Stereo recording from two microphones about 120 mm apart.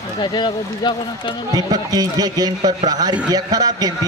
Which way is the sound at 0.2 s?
40° left (ahead or behind).